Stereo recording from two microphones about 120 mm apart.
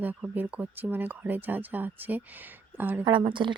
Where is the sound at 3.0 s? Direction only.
40° right (ahead or behind).